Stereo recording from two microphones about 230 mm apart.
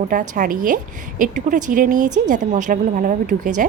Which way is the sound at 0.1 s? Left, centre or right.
Right.